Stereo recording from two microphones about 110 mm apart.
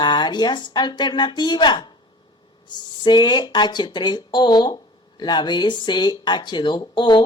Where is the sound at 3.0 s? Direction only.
40° left (ahead or behind).